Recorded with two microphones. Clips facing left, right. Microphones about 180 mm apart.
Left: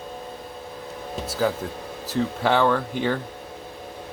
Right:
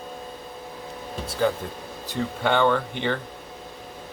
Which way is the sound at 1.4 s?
5° left (ahead or behind).